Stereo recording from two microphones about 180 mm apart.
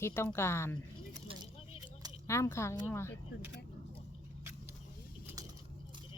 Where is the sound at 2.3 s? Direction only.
15° left (ahead or behind).